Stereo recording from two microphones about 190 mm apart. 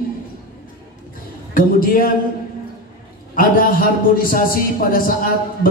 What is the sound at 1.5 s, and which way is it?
Speech, 50° left (ahead or behind).